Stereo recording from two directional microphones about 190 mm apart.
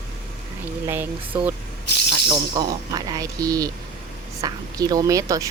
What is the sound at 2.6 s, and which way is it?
Speech, 20° right (ahead or behind).